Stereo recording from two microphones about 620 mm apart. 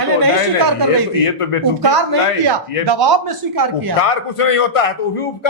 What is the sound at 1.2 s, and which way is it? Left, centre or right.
Speech, left.